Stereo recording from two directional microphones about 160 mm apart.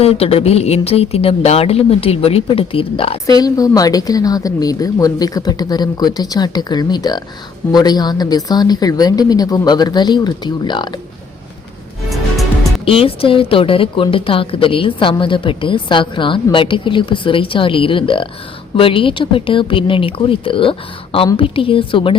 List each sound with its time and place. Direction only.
0.0 s speech: 40° left (ahead or behind)
12.8 s speech: 35° left (ahead or behind)